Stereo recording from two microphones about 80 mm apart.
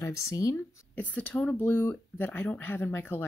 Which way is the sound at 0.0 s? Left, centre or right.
Left.